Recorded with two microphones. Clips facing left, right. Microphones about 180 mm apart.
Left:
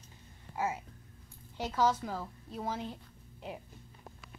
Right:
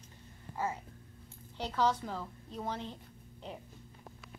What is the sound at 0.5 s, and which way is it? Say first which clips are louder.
A woman's voice: left 2 dB; 10° left (ahead or behind).